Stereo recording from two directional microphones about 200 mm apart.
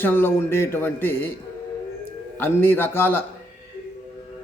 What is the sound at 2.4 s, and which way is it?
Speech, 10° left (ahead or behind).